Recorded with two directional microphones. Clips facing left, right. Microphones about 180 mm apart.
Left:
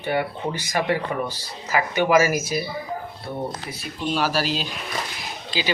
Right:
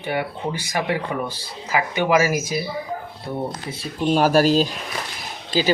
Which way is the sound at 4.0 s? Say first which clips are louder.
Right 7 dB; 45° right (ahead or behind).